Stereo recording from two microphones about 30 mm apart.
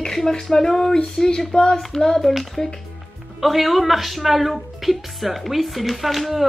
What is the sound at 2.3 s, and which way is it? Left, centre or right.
Speech, centre.